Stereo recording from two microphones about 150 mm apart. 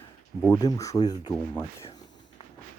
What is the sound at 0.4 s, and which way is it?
Speech, 20° left (ahead or behind).